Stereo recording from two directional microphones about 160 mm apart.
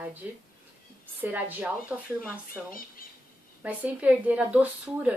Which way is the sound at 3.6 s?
10° right (ahead or behind).